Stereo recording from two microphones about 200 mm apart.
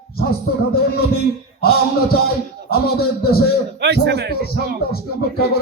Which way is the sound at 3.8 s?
60° right (ahead or behind).